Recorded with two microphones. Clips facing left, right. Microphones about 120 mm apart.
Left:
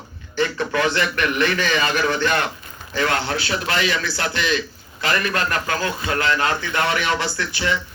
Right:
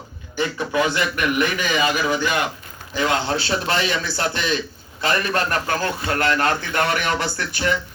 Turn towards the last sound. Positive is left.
turn(degrees=-45)  # may be behind; listen again after turning